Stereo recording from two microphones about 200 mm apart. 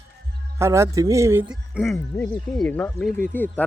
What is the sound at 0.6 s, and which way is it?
Speech, 15° right (ahead or behind).